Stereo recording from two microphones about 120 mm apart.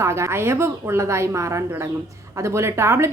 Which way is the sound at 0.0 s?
25° right (ahead or behind).